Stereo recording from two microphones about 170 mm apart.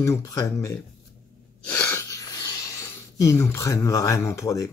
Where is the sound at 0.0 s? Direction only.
20° left (ahead or behind).